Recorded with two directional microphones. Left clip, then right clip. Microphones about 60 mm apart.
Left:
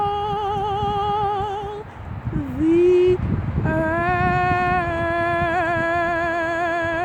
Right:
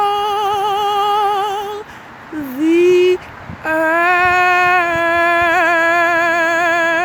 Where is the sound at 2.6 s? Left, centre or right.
Right.